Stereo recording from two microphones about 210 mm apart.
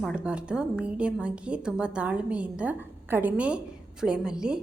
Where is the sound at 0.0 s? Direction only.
5° right (ahead or behind).